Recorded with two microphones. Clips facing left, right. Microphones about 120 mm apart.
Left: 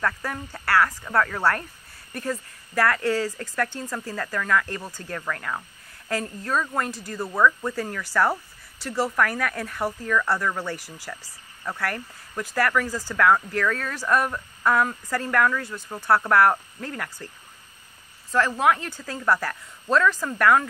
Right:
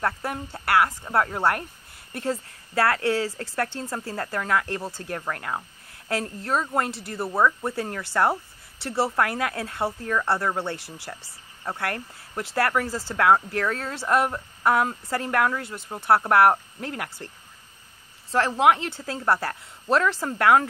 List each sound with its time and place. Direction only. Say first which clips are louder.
0.0 s a woman's voice: right 1 dB; 30° right (ahead or behind)
18.3 s a woman's voice: right 1 dB; 25° right (ahead or behind)